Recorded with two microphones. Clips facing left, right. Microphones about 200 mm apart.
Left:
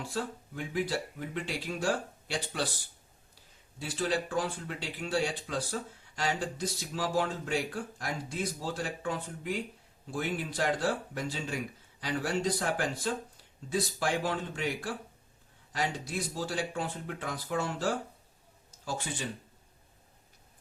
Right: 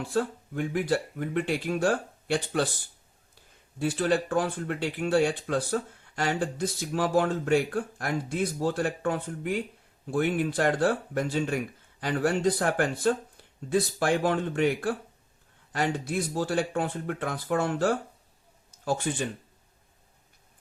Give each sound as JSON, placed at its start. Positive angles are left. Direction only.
{"t": 0.1, "sound": "speech", "side_deg": -55}
{"t": 3.8, "sound": "speech", "side_deg": -55}